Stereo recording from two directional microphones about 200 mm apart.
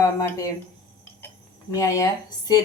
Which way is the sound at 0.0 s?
15° left (ahead or behind).